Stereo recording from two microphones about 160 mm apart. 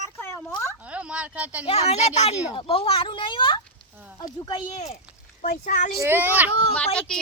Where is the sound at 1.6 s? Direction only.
40° left (ahead or behind).